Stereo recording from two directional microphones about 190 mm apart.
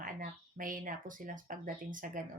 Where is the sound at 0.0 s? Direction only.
45° right (ahead or behind).